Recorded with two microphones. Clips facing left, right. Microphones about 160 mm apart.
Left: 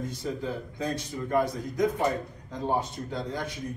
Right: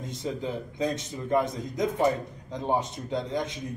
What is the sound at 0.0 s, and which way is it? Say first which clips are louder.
A man's voice: even; 20° right (ahead or behind).